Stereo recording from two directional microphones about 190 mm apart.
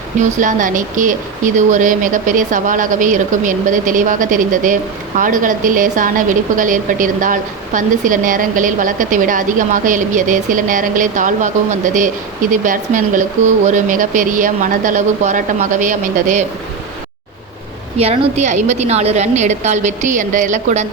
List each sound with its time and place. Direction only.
0.2 s a woman's voice: 40° right (ahead or behind)
17.9 s a woman's voice: 30° right (ahead or behind)